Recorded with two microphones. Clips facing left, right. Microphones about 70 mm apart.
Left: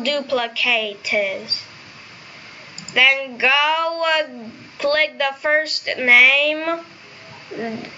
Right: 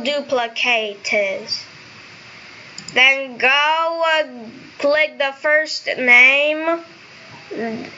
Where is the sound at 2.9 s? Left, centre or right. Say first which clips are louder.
Right 1 dB; centre.